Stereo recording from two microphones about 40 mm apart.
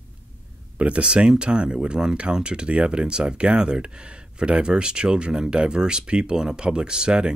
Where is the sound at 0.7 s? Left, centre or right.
Right.